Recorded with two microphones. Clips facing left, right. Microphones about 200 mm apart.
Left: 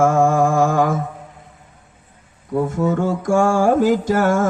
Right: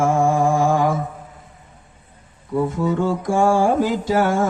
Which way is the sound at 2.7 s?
50° left (ahead or behind).